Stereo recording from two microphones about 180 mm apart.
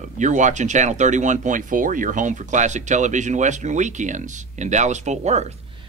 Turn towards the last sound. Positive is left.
turn(degrees=-40)  # may be behind; listen again after turning